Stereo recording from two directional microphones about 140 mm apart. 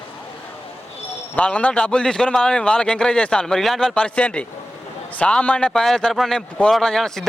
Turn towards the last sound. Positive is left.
turn(degrees=5)  # may be behind; listen again after turning